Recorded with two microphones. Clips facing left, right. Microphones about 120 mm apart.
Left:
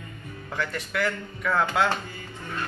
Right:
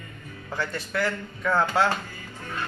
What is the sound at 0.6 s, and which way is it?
Speech, 35° right (ahead or behind).